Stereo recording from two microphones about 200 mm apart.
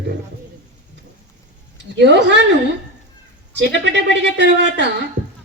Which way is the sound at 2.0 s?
60° right (ahead or behind).